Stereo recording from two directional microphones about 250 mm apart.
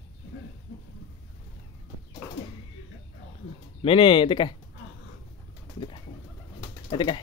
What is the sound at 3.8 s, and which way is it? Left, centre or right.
Speech, centre.